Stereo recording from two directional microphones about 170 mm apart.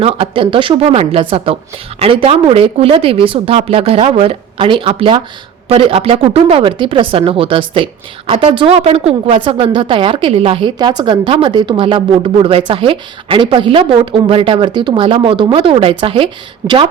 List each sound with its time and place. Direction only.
0.0 s a woman's voice: 35° right (ahead or behind)